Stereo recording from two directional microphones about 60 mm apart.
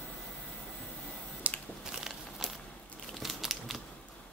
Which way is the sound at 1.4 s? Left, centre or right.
Right.